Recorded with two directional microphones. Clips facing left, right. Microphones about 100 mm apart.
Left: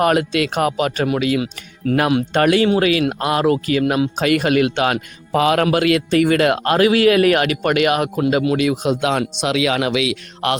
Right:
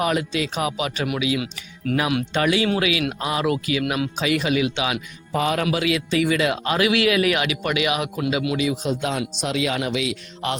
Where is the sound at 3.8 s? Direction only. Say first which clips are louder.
Left 6 dB; 30° left (ahead or behind).